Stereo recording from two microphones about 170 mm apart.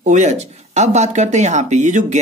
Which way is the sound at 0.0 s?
45° right (ahead or behind).